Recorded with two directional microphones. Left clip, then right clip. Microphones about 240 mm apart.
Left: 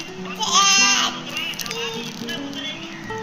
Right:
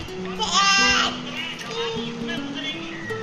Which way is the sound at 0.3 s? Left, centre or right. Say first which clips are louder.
Left 2 dB; centre.